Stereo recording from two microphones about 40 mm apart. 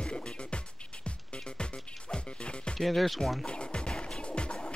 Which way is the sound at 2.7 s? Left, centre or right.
Centre.